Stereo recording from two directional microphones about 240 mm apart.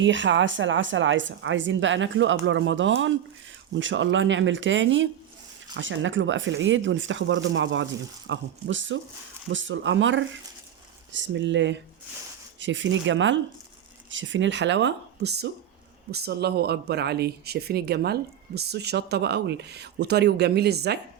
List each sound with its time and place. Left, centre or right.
0.0 s speech: right